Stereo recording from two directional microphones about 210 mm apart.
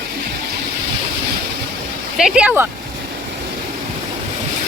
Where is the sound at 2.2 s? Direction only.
5° right (ahead or behind).